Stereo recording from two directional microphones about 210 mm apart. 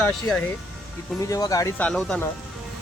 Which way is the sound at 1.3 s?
15° left (ahead or behind).